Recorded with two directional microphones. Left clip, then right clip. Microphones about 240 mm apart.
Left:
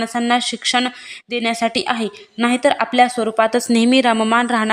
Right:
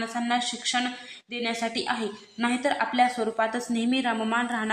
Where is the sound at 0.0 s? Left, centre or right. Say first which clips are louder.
Left 9 dB; left.